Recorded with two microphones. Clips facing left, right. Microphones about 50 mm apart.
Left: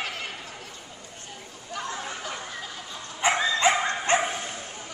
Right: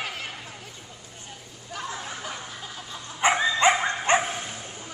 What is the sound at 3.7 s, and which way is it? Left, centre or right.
Dog, centre.